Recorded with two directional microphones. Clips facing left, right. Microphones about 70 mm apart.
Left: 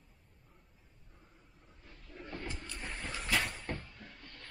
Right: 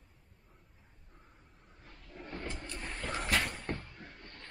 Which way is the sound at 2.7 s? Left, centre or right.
Centre.